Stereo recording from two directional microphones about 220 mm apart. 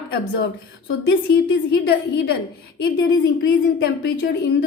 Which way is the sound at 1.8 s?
45° left (ahead or behind).